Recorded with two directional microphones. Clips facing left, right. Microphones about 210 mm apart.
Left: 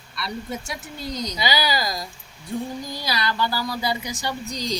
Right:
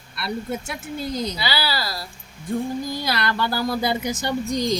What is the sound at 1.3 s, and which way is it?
Speech, 15° left (ahead or behind).